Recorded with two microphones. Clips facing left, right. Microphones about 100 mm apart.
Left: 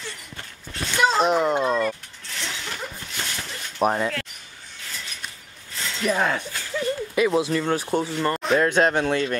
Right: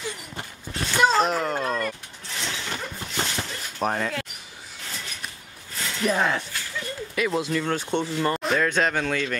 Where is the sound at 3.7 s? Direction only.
15° left (ahead or behind).